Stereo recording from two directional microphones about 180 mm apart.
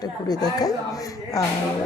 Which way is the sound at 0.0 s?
20° left (ahead or behind).